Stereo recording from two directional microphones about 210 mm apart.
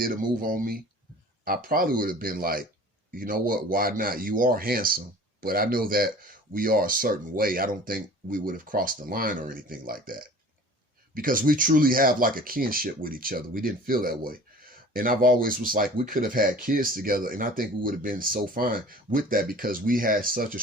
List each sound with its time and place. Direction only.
0.0 s speech: 40° right (ahead or behind)